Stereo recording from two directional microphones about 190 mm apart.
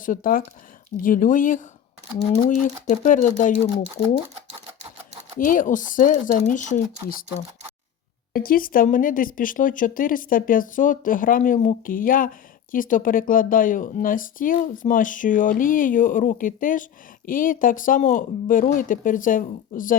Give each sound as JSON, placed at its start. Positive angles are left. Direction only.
{"t": 0.0, "sound": "speech", "side_deg": 45}
{"t": 5.4, "sound": "speech", "side_deg": 45}